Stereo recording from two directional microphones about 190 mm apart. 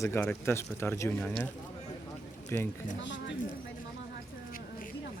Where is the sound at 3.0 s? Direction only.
70° left (ahead or behind).